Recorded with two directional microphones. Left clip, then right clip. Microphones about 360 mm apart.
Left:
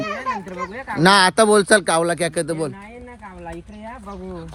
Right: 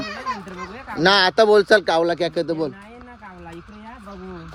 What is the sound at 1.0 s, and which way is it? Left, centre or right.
Speech, centre.